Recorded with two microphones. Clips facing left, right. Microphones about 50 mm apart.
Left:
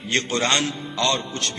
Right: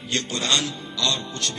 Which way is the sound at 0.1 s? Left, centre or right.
Left.